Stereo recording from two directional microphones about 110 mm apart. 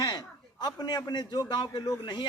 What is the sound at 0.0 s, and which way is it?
A man's voice, 40° left (ahead or behind).